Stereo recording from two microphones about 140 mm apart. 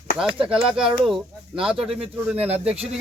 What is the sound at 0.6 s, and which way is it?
Speech, 5° right (ahead or behind).